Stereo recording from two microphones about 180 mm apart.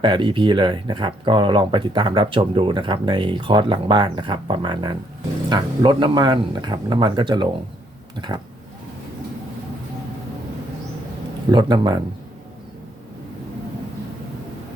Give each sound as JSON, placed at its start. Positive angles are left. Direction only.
{"t": 0.0, "sound": "speech", "side_deg": -25}
{"t": 11.5, "sound": "speech", "side_deg": -25}